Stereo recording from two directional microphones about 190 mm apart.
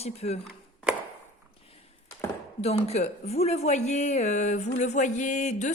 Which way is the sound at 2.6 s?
35° left (ahead or behind).